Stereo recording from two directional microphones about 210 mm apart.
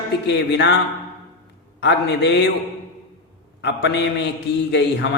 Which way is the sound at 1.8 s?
55° left (ahead or behind).